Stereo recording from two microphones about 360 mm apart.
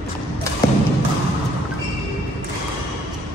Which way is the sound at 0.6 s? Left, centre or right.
Centre.